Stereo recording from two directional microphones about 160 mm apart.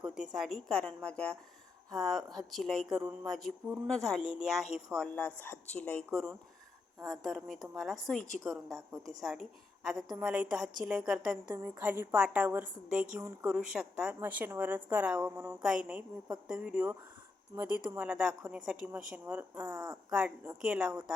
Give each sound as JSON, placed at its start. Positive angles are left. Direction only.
{"t": 0.0, "sound": "a sound", "side_deg": -5}
{"t": 0.7, "sound": "speech", "side_deg": 5}
{"t": 4.2, "sound": "speech", "side_deg": 30}
{"t": 4.4, "sound": "speech", "side_deg": 0}
{"t": 5.1, "sound": "a woman's voice", "side_deg": 10}
{"t": 7.1, "sound": "speech", "side_deg": 0}
{"t": 11.5, "sound": "a woman's voice", "side_deg": -15}
{"t": 13.6, "sound": "a woman's voice", "side_deg": -5}
{"t": 17.5, "sound": "speech", "side_deg": -20}
{"t": 17.9, "sound": "a woman's voice", "side_deg": -10}
{"t": 19.6, "sound": "speech", "side_deg": -25}
{"t": 20.1, "sound": "a woman's voice", "side_deg": -10}